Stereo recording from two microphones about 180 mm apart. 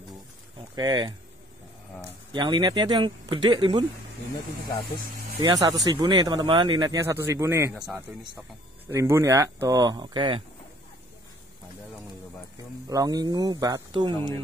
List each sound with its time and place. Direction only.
0.7 s speech: 25° right (ahead or behind)
5.4 s speech: 20° right (ahead or behind)
7.7 s speech: centre (ahead or behind)
8.8 s speech: 15° right (ahead or behind)
12.8 s speech: 20° right (ahead or behind)